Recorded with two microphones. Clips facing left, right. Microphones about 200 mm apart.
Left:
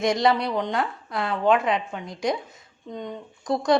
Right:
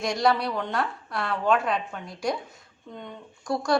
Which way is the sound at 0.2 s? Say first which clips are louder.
Left 2 dB; 20° left (ahead or behind).